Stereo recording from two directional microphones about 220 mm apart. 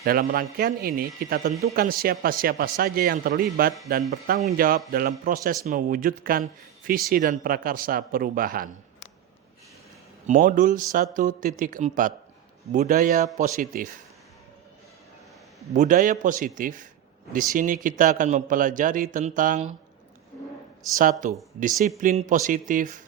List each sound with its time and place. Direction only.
0.0 s speech: 40° right (ahead or behind)
10.2 s speech: 35° right (ahead or behind)
15.7 s speech: 35° right (ahead or behind)
20.9 s speech: 35° right (ahead or behind)